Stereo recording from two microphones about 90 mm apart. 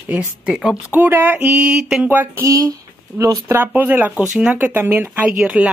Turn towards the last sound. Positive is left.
turn(degrees=-15)  # may be behind; listen again after turning